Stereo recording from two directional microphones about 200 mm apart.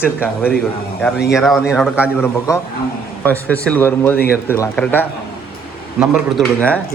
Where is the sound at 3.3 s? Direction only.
10° left (ahead or behind).